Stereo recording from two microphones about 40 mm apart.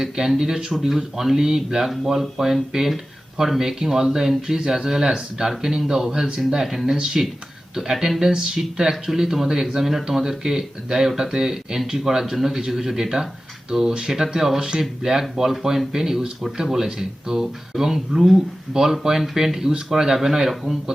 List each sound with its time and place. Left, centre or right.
0.0 s speech: centre
6.9 s speech: centre